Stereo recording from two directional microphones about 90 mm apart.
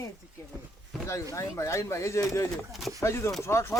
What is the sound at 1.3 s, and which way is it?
Speech, 35° left (ahead or behind).